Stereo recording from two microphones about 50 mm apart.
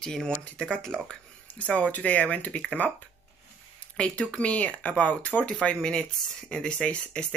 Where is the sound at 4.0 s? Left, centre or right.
Left.